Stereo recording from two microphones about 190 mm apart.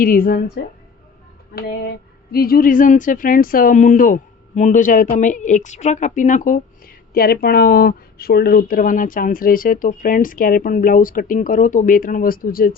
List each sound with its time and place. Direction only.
0.0 s speech: 50° left (ahead or behind)